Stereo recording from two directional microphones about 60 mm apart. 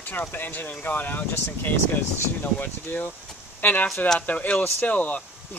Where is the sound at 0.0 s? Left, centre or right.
Left.